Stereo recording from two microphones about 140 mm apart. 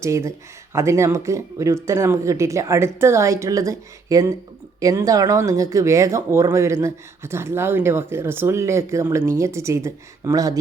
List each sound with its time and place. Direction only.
0.0 s speech: 20° right (ahead or behind)